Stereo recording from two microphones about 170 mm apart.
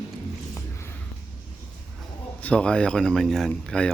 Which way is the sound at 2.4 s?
5° left (ahead or behind).